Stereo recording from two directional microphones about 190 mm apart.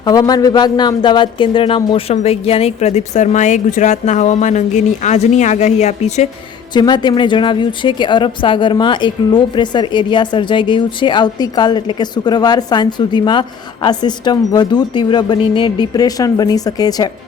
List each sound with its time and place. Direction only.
0.0 s speech: 20° left (ahead or behind); by 6.2 s 35° left (ahead or behind)
6.7 s a woman's voice: 25° left (ahead or behind)